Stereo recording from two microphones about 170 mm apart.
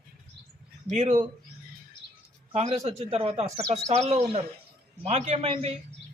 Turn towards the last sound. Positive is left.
turn(degrees=-40)  # may be behind; listen again after turning